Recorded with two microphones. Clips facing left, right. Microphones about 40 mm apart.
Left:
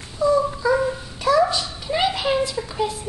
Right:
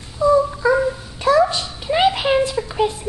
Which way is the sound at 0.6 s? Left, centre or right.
Right.